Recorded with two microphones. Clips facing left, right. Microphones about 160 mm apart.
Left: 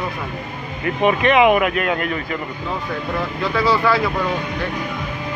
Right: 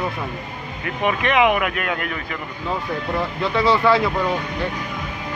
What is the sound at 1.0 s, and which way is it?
Speech, 15° left (ahead or behind).